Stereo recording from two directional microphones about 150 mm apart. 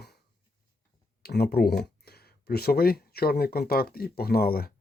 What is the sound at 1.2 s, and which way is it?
Speech, 90° left.